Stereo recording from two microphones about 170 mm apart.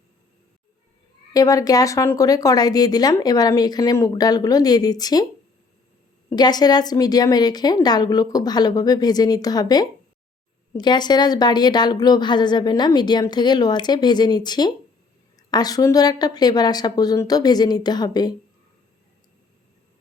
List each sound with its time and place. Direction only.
1.3 s a woman's voice: 20° left (ahead or behind)
6.3 s a woman's voice: 25° left (ahead or behind)